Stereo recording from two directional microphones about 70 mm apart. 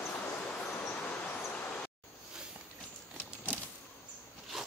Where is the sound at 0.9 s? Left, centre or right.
Left.